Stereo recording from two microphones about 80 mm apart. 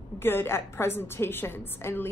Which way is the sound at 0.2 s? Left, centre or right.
Left.